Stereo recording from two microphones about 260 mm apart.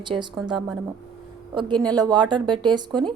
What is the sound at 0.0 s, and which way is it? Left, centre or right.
Speech, centre.